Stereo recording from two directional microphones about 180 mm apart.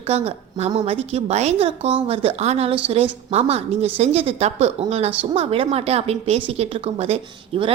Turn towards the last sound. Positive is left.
turn(degrees=-35)  # may be behind; listen again after turning